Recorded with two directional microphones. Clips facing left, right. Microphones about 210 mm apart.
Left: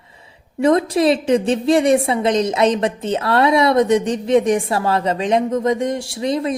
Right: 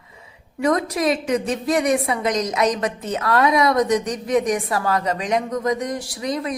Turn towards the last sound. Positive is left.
turn(degrees=25)  # may be behind; listen again after turning